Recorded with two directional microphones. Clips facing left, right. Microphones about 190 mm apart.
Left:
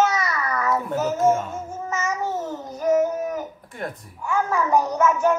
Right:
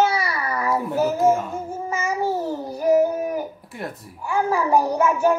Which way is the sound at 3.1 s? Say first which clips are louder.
Right 2 dB; 10° right (ahead or behind).